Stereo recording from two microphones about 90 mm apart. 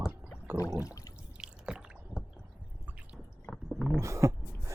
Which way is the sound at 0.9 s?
40° left (ahead or behind).